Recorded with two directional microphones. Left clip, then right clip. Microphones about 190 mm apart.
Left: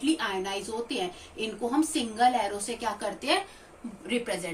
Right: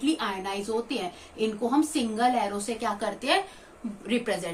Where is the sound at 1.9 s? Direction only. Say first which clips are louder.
Left 1 dB; 30° right (ahead or behind).